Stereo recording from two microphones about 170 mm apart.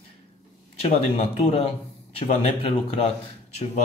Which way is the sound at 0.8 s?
40° left (ahead or behind).